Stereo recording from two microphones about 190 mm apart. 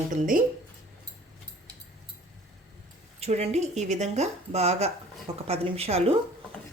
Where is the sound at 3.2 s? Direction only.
35° right (ahead or behind).